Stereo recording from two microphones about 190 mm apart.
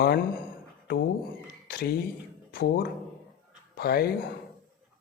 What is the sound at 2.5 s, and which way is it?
Speech, 55° left (ahead or behind).